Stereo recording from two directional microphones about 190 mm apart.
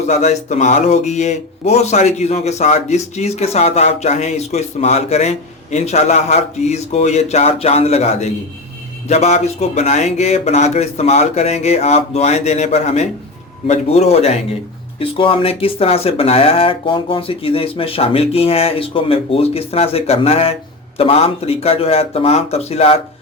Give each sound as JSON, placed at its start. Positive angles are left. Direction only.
{"t": 0.1, "sound": "speech", "side_deg": 35}